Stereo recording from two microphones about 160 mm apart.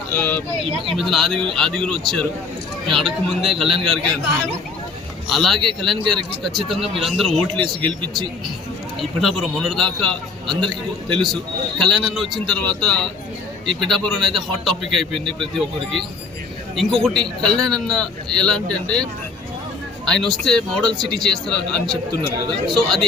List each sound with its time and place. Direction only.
0.1 s speech: 10° left (ahead or behind)
0.9 s a man's voice: centre (ahead or behind)
5.3 s a man's voice: centre (ahead or behind)
9.0 s a man's voice: centre (ahead or behind)
11.1 s a man's voice: 30° right (ahead or behind)
11.8 s a man's voice: centre (ahead or behind)
20.1 s a man's voice: 5° left (ahead or behind)